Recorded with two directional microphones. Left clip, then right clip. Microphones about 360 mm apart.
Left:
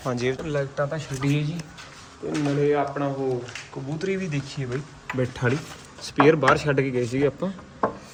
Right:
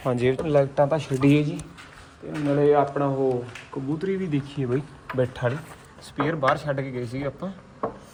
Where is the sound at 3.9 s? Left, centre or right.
Centre.